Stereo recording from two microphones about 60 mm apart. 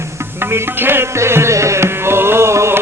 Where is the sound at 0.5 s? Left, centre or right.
Right.